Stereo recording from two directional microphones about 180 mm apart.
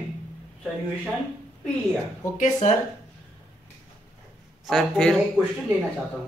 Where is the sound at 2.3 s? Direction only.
40° left (ahead or behind).